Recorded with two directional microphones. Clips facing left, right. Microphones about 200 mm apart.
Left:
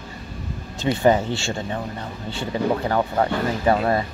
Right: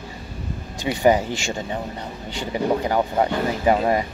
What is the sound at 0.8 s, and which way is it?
Speech, 15° right (ahead or behind).